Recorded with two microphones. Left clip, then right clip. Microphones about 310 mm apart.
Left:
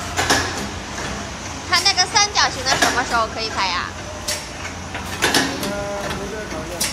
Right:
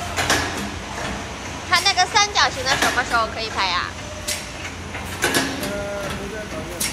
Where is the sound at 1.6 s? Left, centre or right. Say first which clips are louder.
Even; centre.